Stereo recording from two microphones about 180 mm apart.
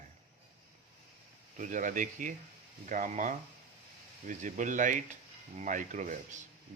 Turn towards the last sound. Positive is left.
turn(degrees=-45)  # may be behind; listen again after turning